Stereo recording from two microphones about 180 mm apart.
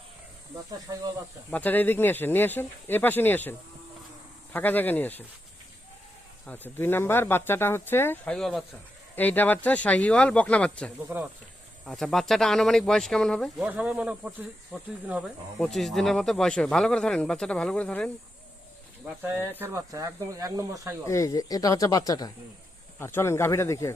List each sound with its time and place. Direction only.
0.9 s speech: 20° right (ahead or behind)
1.5 s speech: 10° left (ahead or behind)
4.5 s speech: 10° left (ahead or behind)
6.4 s speech: 10° left (ahead or behind)
13.7 s speech: 5° right (ahead or behind)
19.2 s speech: 10° right (ahead or behind)
21.1 s speech: 20° left (ahead or behind)